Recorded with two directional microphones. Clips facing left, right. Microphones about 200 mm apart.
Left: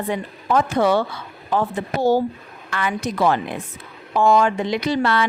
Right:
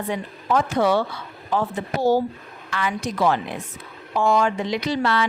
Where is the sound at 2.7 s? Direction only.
55° left (ahead or behind).